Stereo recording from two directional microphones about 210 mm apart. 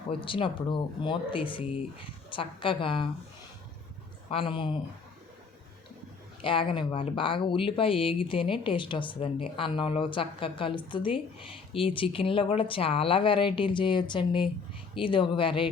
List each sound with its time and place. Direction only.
0.1 s speech: 25° left (ahead or behind)
4.3 s speech: 25° left (ahead or behind)
6.4 s speech: 25° left (ahead or behind)